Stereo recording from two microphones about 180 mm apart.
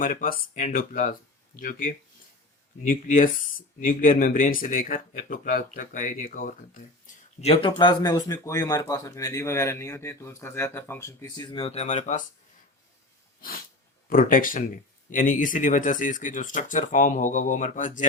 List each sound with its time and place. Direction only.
0.0 s speech: 50° left (ahead or behind)
14.1 s speech: 50° left (ahead or behind)